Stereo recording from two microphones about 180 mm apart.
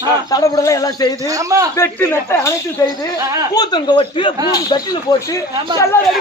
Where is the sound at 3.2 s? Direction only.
20° right (ahead or behind).